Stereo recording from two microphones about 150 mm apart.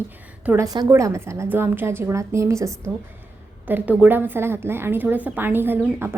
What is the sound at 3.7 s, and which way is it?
A woman's voice, 10° right (ahead or behind).